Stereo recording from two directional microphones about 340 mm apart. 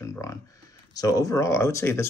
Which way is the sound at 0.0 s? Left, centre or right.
Centre.